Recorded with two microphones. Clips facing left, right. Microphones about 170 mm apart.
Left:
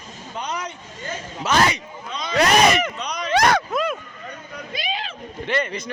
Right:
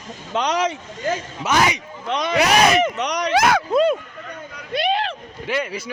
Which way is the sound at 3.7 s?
30° right (ahead or behind).